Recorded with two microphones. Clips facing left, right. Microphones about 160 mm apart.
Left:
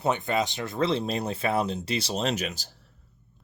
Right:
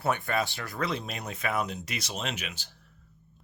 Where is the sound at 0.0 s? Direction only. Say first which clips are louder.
Left 3 dB; 20° left (ahead or behind).